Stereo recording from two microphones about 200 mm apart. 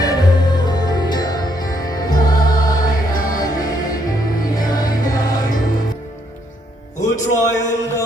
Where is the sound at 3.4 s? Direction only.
20° left (ahead or behind).